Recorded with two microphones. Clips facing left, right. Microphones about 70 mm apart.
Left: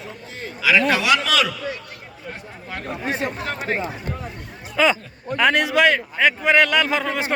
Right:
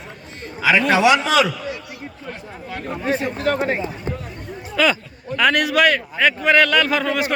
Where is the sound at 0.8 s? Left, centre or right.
Right.